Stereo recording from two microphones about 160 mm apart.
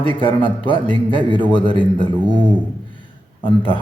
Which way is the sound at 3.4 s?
30° left (ahead or behind).